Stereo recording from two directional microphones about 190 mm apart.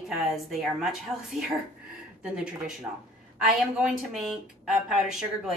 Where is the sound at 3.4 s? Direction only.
5° right (ahead or behind).